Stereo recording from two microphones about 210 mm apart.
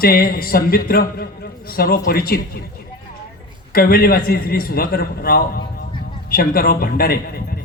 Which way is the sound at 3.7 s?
45° left (ahead or behind).